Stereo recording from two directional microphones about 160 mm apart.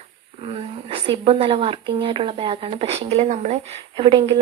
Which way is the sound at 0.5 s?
35° right (ahead or behind).